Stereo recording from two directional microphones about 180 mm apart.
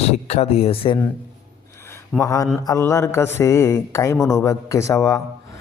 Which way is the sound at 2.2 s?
20° left (ahead or behind).